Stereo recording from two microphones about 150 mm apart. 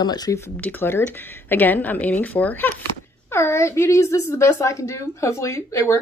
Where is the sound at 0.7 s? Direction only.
15° left (ahead or behind).